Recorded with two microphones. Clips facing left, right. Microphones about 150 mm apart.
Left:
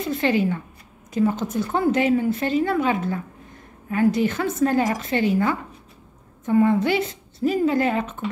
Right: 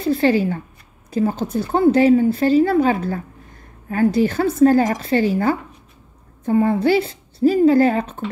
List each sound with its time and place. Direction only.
0.0 s speech: 35° right (ahead or behind)